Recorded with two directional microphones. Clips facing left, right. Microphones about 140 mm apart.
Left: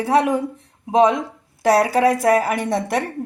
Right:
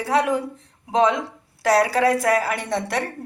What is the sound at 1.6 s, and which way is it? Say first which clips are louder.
A woman's voice: left 2 dB; 20° left (ahead or behind).